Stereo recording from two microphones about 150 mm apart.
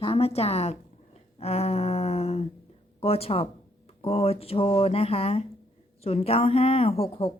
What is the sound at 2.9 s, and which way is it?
A woman's voice, 40° left (ahead or behind).